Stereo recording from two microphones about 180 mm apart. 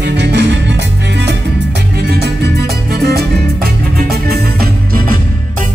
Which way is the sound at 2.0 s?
65° right (ahead or behind).